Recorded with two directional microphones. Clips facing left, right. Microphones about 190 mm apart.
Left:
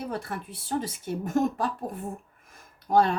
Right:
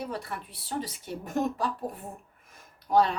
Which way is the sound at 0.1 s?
50° left (ahead or behind).